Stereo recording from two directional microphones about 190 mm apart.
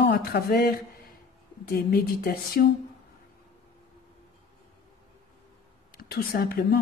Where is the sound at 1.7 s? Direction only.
55° left (ahead or behind).